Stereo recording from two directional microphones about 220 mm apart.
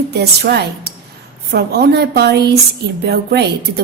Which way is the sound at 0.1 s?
45° right (ahead or behind).